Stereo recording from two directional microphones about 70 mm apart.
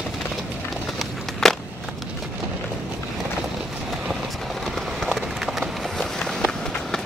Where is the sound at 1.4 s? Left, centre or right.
Centre.